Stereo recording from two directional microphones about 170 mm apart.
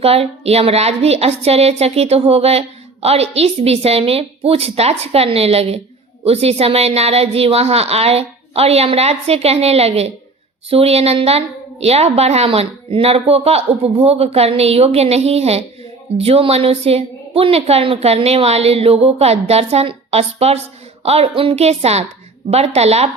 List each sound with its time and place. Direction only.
0.0 s a woman's voice: 35° right (ahead or behind)